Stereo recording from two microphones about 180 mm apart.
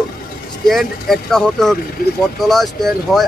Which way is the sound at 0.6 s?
Centre (ahead or behind).